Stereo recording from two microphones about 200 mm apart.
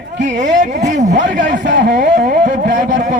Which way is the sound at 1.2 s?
65° right (ahead or behind).